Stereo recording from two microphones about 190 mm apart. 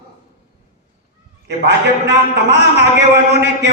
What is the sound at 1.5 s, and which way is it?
A man's voice, 60° right (ahead or behind).